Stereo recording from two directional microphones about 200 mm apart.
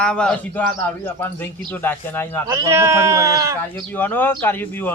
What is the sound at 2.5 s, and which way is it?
Speech, 15° right (ahead or behind).